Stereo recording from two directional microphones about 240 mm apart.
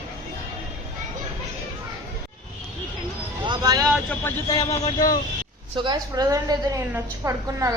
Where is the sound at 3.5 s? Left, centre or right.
Centre.